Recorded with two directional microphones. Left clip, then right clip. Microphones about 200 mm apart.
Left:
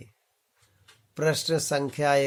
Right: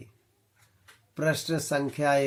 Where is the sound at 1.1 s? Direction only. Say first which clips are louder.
Left 3 dB; 25° left (ahead or behind).